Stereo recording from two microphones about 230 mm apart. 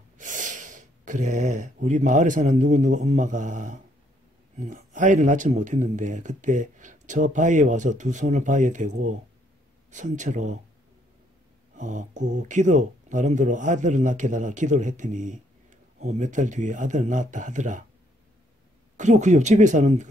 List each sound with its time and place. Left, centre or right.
0.2 s speech: right
11.7 s speech: right
18.9 s speech: right